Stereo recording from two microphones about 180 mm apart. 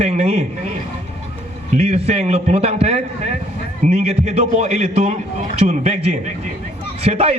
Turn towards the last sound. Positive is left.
turn(degrees=-35)  # may be behind; listen again after turning